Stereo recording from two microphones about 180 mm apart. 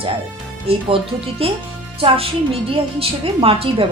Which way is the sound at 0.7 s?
30° right (ahead or behind).